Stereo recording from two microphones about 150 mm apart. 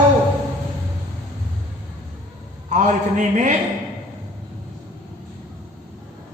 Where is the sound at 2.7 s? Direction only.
55° right (ahead or behind).